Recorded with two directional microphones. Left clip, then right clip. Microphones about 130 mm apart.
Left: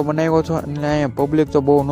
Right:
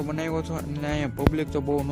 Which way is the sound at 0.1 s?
55° left (ahead or behind).